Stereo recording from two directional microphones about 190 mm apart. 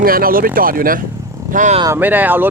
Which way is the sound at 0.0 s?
50° right (ahead or behind).